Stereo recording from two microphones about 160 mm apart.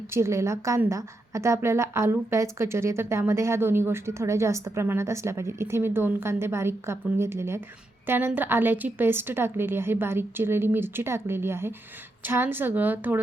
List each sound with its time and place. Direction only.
0.1 s a woman's voice: 15° right (ahead or behind)